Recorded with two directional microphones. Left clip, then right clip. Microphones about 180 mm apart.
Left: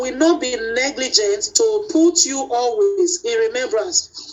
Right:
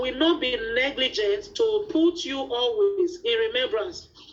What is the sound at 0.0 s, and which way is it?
A woman's voice, 50° left (ahead or behind).